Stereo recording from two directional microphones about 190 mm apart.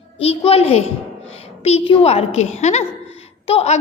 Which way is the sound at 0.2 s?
30° left (ahead or behind).